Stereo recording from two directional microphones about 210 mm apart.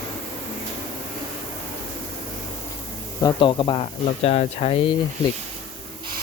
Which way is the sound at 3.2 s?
20° left (ahead or behind).